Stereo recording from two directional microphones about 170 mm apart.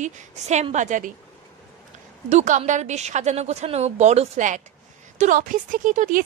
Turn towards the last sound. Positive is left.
turn(degrees=-50)  # may be behind; listen again after turning